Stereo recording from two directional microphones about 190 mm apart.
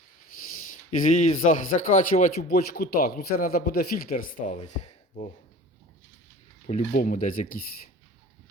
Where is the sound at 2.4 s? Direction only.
55° left (ahead or behind); by 5.3 s 40° left (ahead or behind).